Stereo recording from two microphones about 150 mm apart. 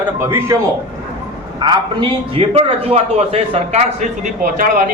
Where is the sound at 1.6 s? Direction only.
35° right (ahead or behind).